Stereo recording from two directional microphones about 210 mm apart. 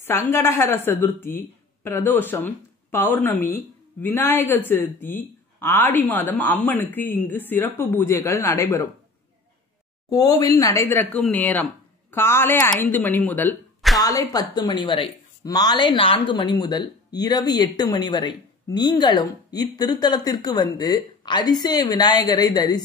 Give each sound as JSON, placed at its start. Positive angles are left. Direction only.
{"t": 0.0, "sound": "speech", "side_deg": 15}
{"t": 10.0, "sound": "speech", "side_deg": 15}
{"t": 14.0, "sound": "speech", "side_deg": 15}